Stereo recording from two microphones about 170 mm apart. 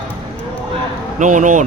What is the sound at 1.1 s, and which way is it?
Speech, 45° right (ahead or behind).